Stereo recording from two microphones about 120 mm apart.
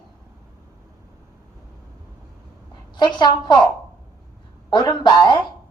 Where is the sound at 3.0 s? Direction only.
40° left (ahead or behind).